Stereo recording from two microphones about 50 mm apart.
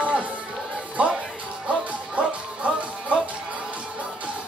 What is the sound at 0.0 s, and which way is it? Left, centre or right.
Music, right.